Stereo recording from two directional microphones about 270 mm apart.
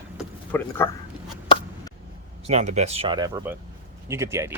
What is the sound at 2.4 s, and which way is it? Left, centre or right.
Speech, right.